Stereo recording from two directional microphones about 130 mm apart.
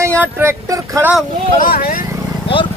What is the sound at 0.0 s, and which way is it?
Speech, 20° right (ahead or behind).